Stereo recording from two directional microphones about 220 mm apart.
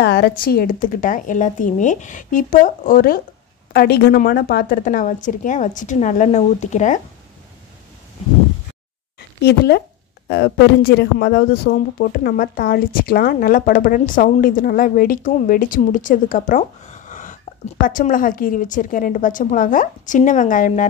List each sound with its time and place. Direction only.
0.0 s a woman's voice: 50° left (ahead or behind); by 7.0 s 35° left (ahead or behind)
9.4 s speech: 50° left (ahead or behind)